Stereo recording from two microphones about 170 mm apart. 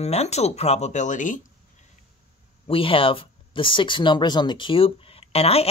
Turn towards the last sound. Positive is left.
turn(degrees=35)  # may be behind; listen again after turning